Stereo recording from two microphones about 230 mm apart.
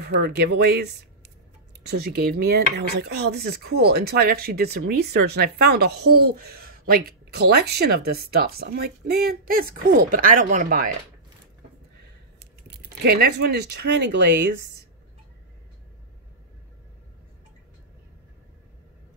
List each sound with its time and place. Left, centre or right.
0.0 s speech: right
1.8 s speech: right
12.6 s speech: right